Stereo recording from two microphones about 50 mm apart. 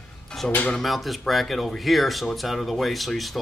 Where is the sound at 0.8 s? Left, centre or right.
Centre.